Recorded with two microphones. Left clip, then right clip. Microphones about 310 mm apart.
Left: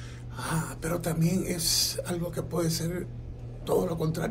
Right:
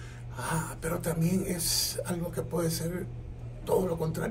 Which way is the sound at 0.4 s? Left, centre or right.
Centre.